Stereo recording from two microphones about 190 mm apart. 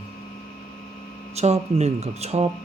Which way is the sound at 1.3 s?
35° right (ahead or behind).